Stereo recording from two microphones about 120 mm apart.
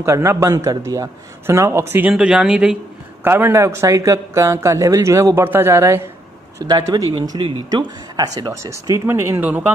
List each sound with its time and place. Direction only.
0.0 s speech: 25° right (ahead or behind)
2.1 s speech: 10° right (ahead or behind)
3.3 s speech: 20° right (ahead or behind)
6.6 s speech: 35° right (ahead or behind); by 9.7 s 15° right (ahead or behind)